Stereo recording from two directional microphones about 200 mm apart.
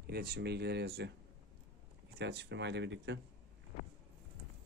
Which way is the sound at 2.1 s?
60° right (ahead or behind).